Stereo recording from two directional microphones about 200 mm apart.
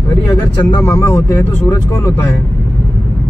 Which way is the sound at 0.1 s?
15° left (ahead or behind).